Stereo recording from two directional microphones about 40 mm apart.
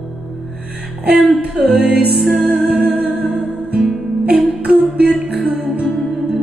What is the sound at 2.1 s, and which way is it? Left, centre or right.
Music, centre.